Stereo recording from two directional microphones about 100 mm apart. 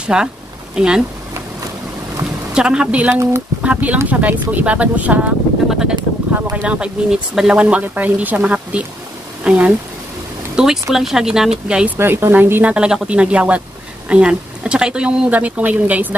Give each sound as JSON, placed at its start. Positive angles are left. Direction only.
{"t": 0.0, "sound": "speech", "side_deg": -10}
{"t": 2.5, "sound": "speech", "side_deg": -10}
{"t": 12.0, "sound": "speech", "side_deg": -20}
{"t": 12.7, "sound": "speech", "side_deg": -10}